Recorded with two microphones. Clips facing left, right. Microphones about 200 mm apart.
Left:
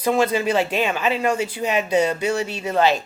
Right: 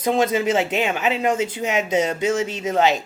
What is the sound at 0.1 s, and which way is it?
Speech, 20° right (ahead or behind).